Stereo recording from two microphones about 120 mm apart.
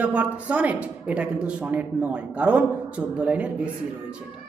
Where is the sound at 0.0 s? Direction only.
10° right (ahead or behind).